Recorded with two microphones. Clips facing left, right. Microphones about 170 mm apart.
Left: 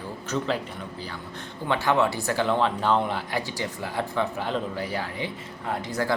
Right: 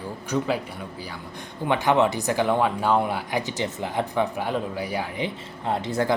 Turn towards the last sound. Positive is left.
turn(degrees=-25)  # may be behind; listen again after turning